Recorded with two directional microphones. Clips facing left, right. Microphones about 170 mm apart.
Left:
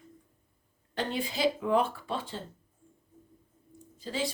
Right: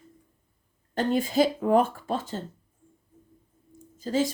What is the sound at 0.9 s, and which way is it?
A woman's voice, 45° right (ahead or behind).